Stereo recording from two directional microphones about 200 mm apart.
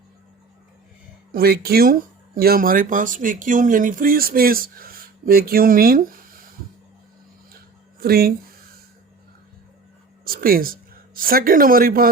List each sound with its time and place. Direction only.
1.3 s speech: 50° right (ahead or behind)
7.9 s speech: 50° right (ahead or behind)
10.2 s speech: 45° right (ahead or behind)